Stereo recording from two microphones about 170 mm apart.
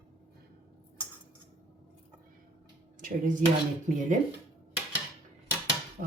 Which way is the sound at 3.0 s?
50° right (ahead or behind).